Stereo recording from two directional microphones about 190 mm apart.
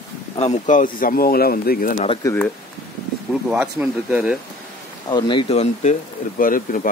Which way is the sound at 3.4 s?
5° right (ahead or behind).